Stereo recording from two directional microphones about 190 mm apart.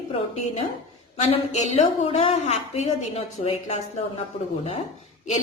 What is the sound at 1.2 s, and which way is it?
A woman's voice, 35° left (ahead or behind).